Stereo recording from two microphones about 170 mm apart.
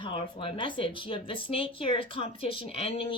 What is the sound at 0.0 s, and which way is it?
Speech, 30° left (ahead or behind).